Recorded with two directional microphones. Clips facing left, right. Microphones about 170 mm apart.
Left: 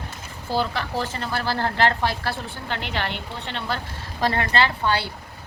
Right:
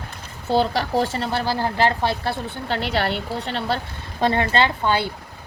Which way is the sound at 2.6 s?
35° right (ahead or behind).